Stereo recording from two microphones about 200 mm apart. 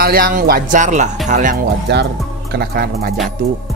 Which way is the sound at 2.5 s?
50° right (ahead or behind).